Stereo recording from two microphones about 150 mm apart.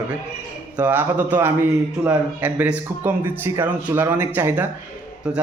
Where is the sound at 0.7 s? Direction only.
10° right (ahead or behind).